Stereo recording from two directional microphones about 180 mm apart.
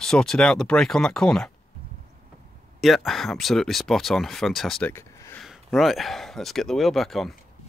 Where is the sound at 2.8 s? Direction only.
Centre (ahead or behind).